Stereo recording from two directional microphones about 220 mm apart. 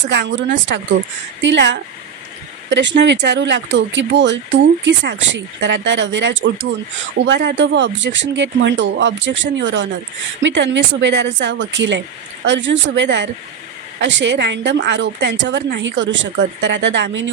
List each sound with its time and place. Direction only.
0.1 s a woman's voice: 55° right (ahead or behind)